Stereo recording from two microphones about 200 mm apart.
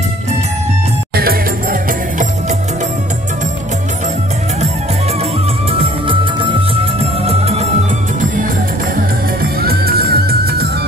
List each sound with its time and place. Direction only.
1.1 s music: 45° right (ahead or behind)
5.7 s music: 25° right (ahead or behind)
9.6 s music: 50° right (ahead or behind)